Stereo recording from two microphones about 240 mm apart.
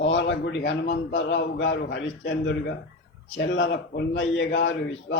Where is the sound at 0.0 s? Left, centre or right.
Left.